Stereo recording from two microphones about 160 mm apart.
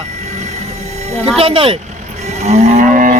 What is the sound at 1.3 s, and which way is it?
Speech, 35° right (ahead or behind).